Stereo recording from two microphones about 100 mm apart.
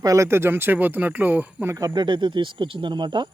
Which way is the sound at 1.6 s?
35° right (ahead or behind).